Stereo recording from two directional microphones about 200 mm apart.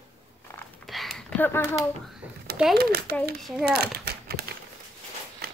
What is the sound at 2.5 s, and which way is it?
Speech, centre (ahead or behind).